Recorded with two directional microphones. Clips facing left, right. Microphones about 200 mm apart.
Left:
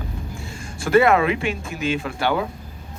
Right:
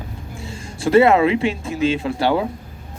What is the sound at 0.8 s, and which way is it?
Speech, 30° right (ahead or behind).